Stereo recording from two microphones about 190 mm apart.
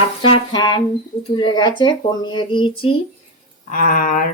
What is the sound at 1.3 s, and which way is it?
Speech, 25° left (ahead or behind).